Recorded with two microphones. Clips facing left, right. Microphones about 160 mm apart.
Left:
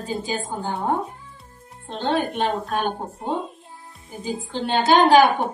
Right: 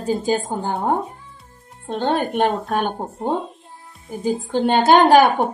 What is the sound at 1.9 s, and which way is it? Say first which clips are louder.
Speech: right 3 dB; 50° right (ahead or behind).